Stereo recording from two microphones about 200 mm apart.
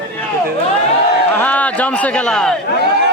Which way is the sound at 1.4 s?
5° left (ahead or behind).